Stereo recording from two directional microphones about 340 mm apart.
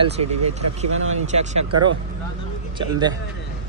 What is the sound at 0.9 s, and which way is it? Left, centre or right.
Speech, right.